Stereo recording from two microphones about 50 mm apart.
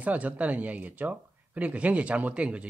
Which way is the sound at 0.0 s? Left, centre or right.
Right.